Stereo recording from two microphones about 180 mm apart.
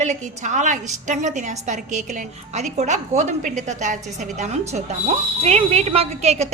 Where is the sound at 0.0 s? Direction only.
40° right (ahead or behind).